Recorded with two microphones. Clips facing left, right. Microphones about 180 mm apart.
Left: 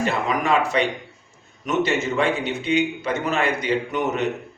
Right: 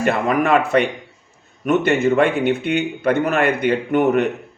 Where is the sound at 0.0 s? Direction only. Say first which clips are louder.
Right 5 dB; 55° right (ahead or behind).